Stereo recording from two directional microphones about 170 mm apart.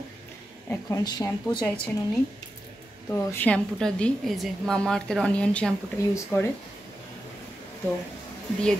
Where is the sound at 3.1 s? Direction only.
15° left (ahead or behind).